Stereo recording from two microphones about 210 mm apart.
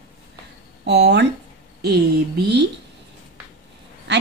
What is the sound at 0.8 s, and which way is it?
Speech, 55° right (ahead or behind).